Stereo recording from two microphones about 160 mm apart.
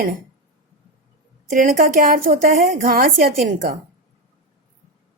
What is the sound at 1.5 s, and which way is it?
A woman's voice, 60° right (ahead or behind).